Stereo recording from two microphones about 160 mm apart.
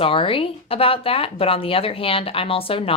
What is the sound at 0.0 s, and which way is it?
Speech, 35° left (ahead or behind).